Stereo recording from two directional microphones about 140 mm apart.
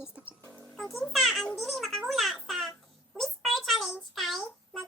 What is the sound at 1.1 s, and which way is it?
Speech, centre (ahead or behind).